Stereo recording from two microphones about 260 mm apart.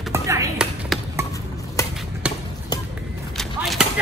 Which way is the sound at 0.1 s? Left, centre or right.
Centre.